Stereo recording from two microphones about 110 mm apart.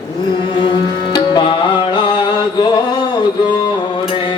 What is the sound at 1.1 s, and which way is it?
Music, 45° left (ahead or behind).